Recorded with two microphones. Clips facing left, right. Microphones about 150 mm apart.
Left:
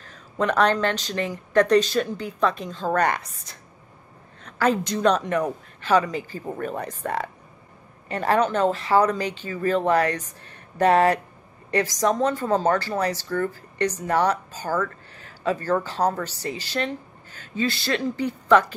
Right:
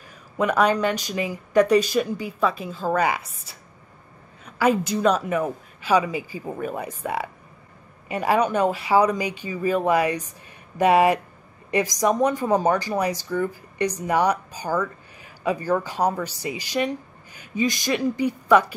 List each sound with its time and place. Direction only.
0.0 s speech: 10° right (ahead or behind)